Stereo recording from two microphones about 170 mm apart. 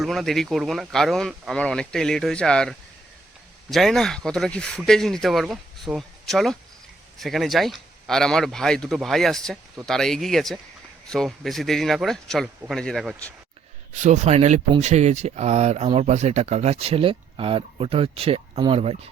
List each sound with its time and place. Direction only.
0.0 s speech: centre (ahead or behind)
13.9 s speech: 45° right (ahead or behind)